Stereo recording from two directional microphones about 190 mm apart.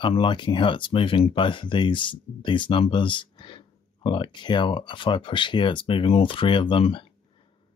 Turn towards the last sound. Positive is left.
turn(degrees=25)  # may be behind; listen again after turning